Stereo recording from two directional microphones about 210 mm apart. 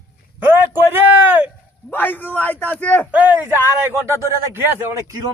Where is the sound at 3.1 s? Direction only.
5° right (ahead or behind).